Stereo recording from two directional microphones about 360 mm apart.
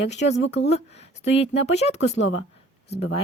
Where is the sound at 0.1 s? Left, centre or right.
Centre.